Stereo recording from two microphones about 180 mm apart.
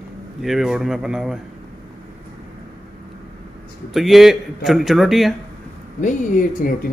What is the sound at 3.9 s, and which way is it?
Speech, centre (ahead or behind).